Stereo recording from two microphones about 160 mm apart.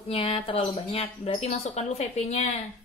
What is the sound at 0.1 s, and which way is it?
Speech, 35° left (ahead or behind).